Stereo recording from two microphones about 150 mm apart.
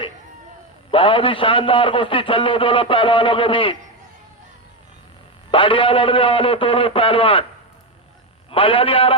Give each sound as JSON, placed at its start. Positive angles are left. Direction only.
{"t": 0.9, "sound": "a man's voice", "side_deg": 35}
{"t": 5.5, "sound": "a man's voice", "side_deg": 35}
{"t": 8.4, "sound": "a man's voice", "side_deg": 35}